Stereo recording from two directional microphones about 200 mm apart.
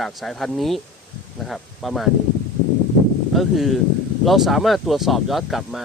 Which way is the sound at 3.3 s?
Centre (ahead or behind).